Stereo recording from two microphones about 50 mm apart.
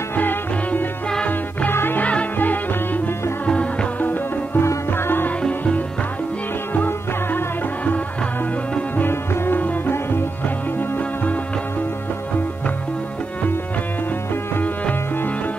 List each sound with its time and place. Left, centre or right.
0.1 s music: left
1.7 s music: left
2.0 s music: left
2.3 s music: left
4.6 s music: left
8.9 s music: left